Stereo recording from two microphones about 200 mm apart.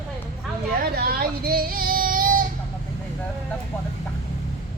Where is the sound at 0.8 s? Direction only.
50° right (ahead or behind).